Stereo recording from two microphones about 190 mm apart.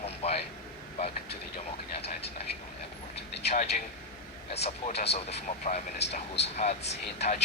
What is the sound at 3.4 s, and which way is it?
Speech, 35° left (ahead or behind).